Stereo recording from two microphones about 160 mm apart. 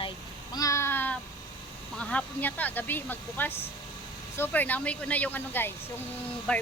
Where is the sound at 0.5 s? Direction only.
20° left (ahead or behind).